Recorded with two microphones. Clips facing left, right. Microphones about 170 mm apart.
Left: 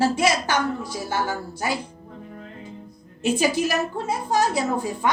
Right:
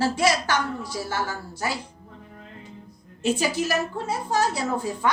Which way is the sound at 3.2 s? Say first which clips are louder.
Left 3 dB; 15° left (ahead or behind).